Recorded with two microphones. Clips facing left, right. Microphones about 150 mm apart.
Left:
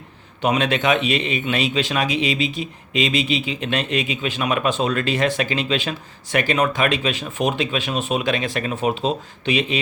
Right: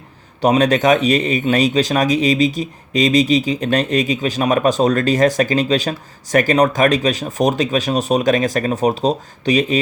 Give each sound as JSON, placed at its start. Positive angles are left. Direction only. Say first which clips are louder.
{"t": 0.4, "sound": "speech", "louder": "right 6 dB", "side_deg": -40}